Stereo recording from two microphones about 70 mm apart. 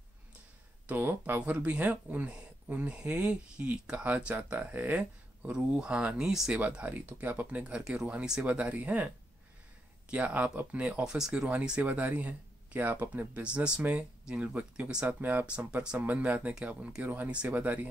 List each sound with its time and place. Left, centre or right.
0.8 s speech: right
10.1 s speech: centre
11.1 s speech: centre
11.8 s speech: right
15.0 s speech: right